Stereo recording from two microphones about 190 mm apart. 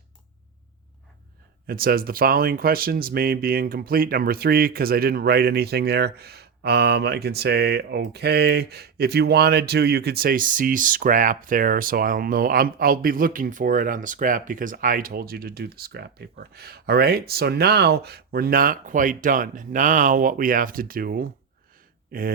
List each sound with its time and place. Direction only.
1.6 s speech: 50° right (ahead or behind)